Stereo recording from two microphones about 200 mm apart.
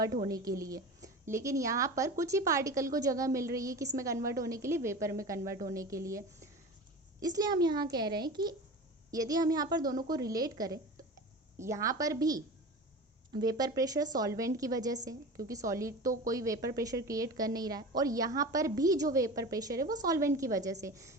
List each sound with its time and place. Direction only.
0.3 s a woman's voice: 20° right (ahead or behind)